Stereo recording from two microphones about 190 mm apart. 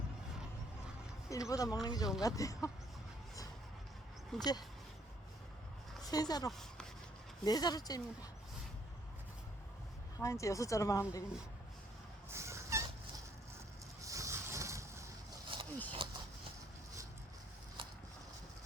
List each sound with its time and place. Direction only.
1.3 s speech: 15° left (ahead or behind)
4.4 s speech: 20° left (ahead or behind)
6.0 s speech: 20° left (ahead or behind)
6.5 s a sound: centre (ahead or behind)
7.4 s speech: 20° left (ahead or behind)
10.2 s speech: 15° left (ahead or behind)
12.3 s fowl: 15° right (ahead or behind)
14.0 s vehicle: 15° right (ahead or behind)
15.5 s a sound: 25° right (ahead or behind)